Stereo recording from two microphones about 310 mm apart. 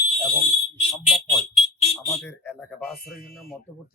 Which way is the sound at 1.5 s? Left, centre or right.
Centre.